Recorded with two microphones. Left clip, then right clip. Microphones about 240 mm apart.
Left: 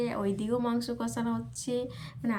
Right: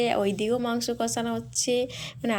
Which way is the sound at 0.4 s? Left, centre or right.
Centre.